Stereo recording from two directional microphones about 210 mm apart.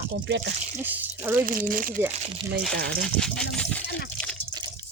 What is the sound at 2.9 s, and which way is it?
Speech, 5° left (ahead or behind).